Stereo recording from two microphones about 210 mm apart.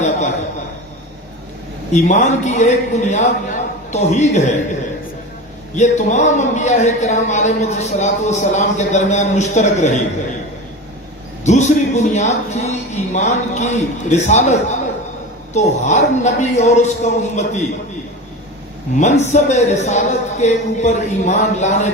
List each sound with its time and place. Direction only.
1.9 s a man's voice: 35° left (ahead or behind)
5.7 s a man's voice: 35° left (ahead or behind)
11.4 s a man's voice: 35° left (ahead or behind)
18.9 s a man's voice: 35° left (ahead or behind)